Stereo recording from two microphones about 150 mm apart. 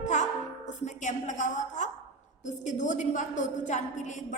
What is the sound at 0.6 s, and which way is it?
A woman's voice, 55° left (ahead or behind).